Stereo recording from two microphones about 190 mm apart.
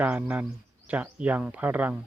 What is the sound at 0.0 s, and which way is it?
Speech, 10° right (ahead or behind).